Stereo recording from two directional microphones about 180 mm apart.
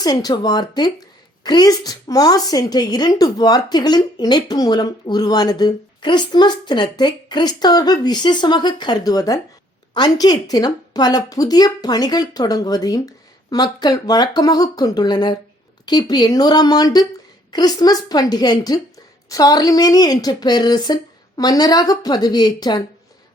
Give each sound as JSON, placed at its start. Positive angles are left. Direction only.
{"t": 0.0, "sound": "a woman's voice", "side_deg": 20}